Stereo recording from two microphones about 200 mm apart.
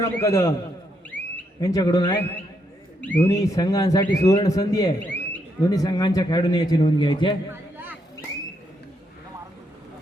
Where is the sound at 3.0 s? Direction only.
10° left (ahead or behind).